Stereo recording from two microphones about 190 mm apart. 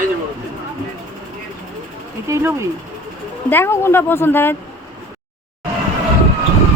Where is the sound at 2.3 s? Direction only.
15° right (ahead or behind).